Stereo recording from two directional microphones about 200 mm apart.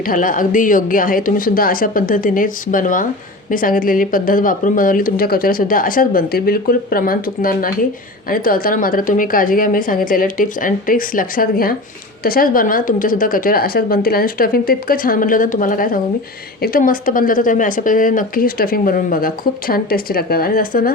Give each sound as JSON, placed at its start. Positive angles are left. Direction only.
{"t": 0.0, "sound": "speech", "side_deg": 45}